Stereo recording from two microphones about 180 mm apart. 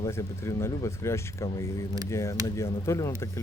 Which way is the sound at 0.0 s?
15° left (ahead or behind).